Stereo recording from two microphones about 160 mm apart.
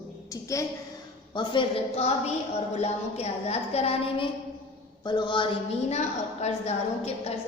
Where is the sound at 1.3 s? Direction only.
30° left (ahead or behind).